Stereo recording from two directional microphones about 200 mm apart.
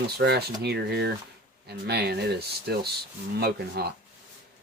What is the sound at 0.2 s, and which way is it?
Speech, 55° right (ahead or behind).